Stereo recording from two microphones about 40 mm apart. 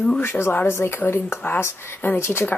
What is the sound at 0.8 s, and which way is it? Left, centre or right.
Speech, left.